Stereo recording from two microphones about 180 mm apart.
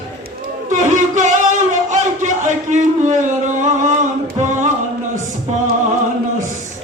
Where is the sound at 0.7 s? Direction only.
45° right (ahead or behind).